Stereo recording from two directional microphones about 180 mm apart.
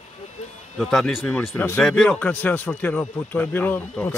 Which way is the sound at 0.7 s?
Centre (ahead or behind).